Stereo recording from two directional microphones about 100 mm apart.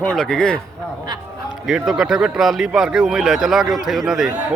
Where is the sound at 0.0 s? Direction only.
10° left (ahead or behind).